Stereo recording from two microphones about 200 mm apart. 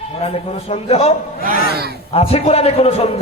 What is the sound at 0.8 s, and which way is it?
Speech, 30° left (ahead or behind).